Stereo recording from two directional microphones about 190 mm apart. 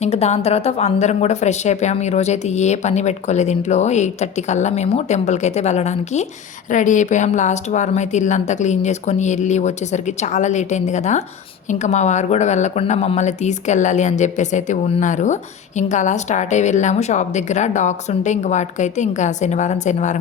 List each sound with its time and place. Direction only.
0.0 s speech: 35° left (ahead or behind)